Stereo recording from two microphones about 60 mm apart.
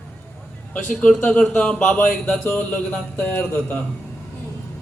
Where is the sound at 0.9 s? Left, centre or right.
Centre.